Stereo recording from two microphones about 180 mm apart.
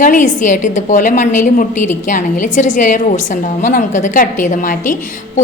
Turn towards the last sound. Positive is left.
turn(degrees=50)  # may be behind; listen again after turning